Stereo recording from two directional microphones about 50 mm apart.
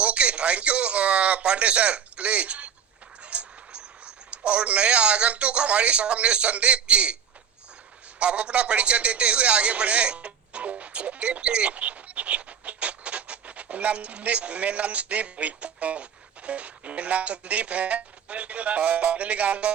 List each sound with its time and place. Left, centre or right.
0.0 s a man's voice: right
8.2 s a man's voice: right